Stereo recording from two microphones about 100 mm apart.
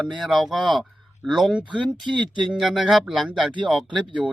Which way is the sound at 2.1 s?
50° right (ahead or behind).